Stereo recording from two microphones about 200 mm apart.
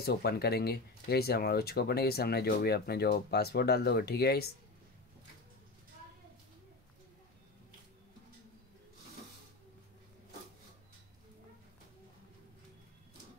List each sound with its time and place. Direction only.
0.0 s speech: 50° left (ahead or behind)